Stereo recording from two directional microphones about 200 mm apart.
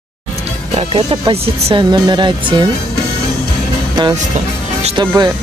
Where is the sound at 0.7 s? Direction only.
30° right (ahead or behind).